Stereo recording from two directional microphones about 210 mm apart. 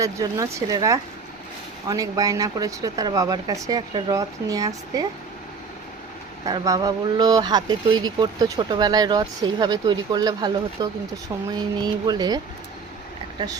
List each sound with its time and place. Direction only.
0.0 s speech: 15° right (ahead or behind)
6.4 s speech: 20° right (ahead or behind)